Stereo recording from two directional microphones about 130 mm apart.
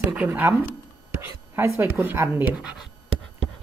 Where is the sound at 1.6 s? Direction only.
20° right (ahead or behind).